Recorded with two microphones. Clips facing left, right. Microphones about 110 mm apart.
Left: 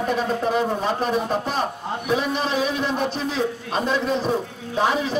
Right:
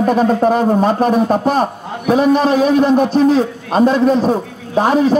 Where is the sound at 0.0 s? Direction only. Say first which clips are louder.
Right 10 dB; 50° right (ahead or behind).